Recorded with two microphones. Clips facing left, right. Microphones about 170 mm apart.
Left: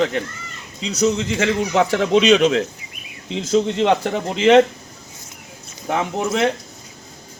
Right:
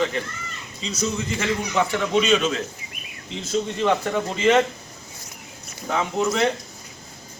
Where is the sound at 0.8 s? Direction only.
85° left.